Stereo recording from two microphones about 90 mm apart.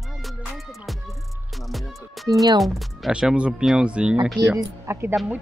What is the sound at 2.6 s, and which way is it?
Speech, centre (ahead or behind).